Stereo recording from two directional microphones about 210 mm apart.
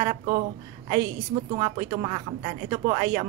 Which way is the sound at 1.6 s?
25° right (ahead or behind).